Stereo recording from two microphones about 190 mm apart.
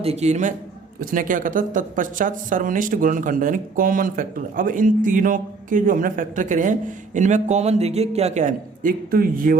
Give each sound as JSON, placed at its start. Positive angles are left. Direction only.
{"t": 0.0, "sound": "a man's voice", "side_deg": -35}